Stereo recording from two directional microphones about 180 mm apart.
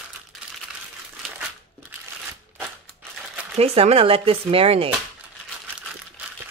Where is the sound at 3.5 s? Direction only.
35° right (ahead or behind).